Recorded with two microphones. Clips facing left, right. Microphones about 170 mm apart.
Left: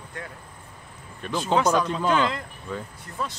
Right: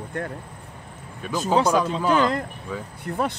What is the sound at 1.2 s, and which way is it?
Speech, 5° right (ahead or behind).